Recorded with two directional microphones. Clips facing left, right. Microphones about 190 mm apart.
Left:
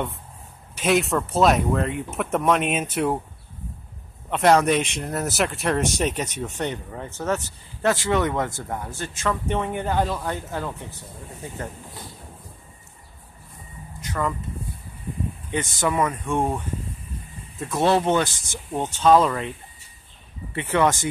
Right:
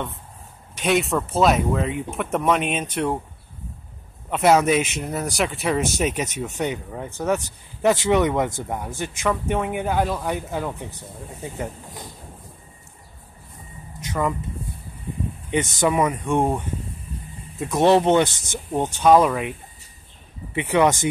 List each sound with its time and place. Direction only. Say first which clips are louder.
0.7 s speech: even; centre (ahead or behind)
4.3 s speech: right 1 dB; 5° right (ahead or behind)
14.0 s speech: right 2 dB; 15° right (ahead or behind)
15.5 s speech: right 4 dB; 20° right (ahead or behind)
20.5 s speech: right 2 dB; 15° right (ahead or behind)